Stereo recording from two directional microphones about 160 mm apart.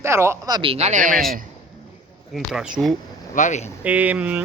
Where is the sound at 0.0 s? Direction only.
15° right (ahead or behind); by 1.2 s 55° right (ahead or behind).